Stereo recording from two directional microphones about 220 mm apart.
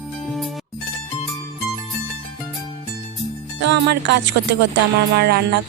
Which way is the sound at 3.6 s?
55° right (ahead or behind).